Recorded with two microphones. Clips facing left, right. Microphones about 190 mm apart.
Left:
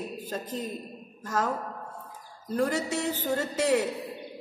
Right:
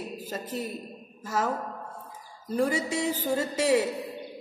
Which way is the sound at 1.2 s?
5° right (ahead or behind).